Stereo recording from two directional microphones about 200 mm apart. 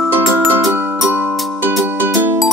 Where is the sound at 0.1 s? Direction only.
10° right (ahead or behind).